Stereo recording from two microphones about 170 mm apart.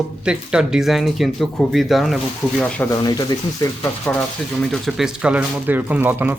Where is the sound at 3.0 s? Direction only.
25° left (ahead or behind).